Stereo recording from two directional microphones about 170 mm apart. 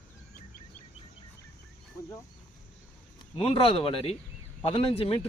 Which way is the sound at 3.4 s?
35° left (ahead or behind).